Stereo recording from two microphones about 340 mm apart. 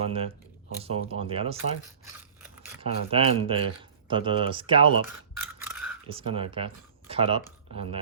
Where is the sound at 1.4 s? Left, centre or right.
Centre.